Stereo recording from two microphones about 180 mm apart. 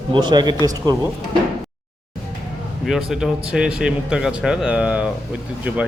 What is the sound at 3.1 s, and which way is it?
A man's voice, centre (ahead or behind).